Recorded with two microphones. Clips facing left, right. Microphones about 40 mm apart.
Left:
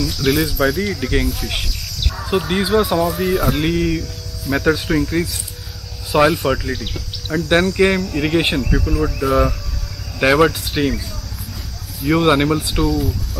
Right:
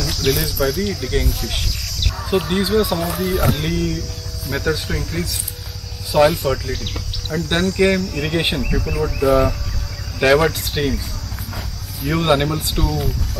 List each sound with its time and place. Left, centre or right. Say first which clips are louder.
0.0 s speech: left 3 dB; centre
3.6 s speech: left 4 dB; centre
9.2 s speech: right 3 dB; centre
12.1 s speech: left 3 dB; centre